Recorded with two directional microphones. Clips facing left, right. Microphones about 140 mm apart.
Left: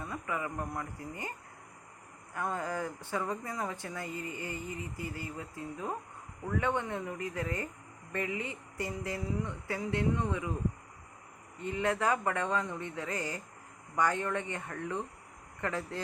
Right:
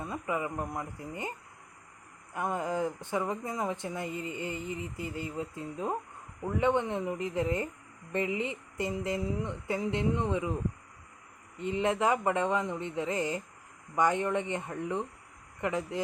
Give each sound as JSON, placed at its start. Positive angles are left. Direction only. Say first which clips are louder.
{"t": 0.0, "sound": "speech", "louder": "right 3 dB", "side_deg": -20}
{"t": 2.3, "sound": "speech", "louder": "right 3 dB", "side_deg": -20}
{"t": 11.5, "sound": "speech", "louder": "right 3 dB", "side_deg": -20}